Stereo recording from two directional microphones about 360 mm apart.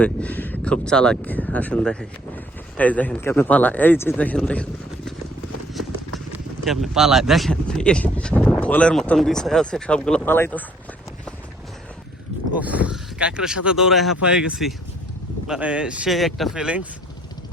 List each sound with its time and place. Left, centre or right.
0.0 s speech: centre
6.3 s speech: centre
12.5 s speech: centre